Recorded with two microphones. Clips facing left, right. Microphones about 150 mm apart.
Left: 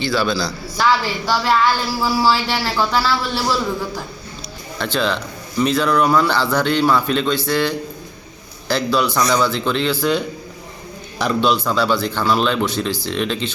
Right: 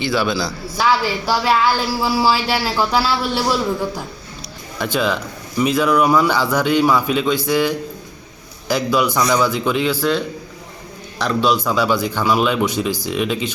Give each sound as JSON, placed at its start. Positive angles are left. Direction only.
{"t": 0.0, "sound": "a woman's voice", "side_deg": -15}